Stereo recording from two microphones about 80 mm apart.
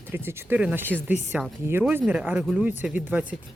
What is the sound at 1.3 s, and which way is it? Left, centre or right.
Speech, centre.